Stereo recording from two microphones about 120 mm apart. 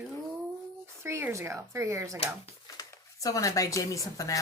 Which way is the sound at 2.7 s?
30° left (ahead or behind).